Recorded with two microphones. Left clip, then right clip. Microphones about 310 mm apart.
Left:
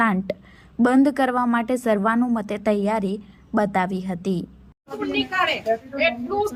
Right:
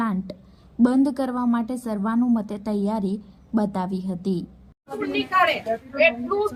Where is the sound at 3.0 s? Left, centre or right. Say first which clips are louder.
Left 3 dB; left.